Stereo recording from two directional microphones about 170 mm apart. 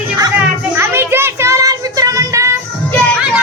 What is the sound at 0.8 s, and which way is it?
Child singing, 15° right (ahead or behind).